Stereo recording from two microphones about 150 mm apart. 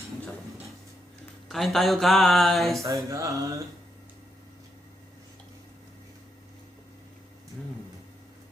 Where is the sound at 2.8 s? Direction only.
20° right (ahead or behind).